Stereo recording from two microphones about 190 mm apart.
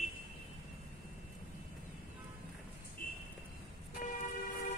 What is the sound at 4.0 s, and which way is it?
Vehicle, 40° left (ahead or behind).